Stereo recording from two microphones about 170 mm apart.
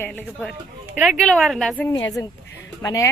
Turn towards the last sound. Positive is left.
turn(degrees=20)  # may be behind; listen again after turning